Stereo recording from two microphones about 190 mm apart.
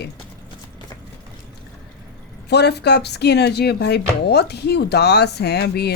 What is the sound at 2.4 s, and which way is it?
Speech, 60° left (ahead or behind).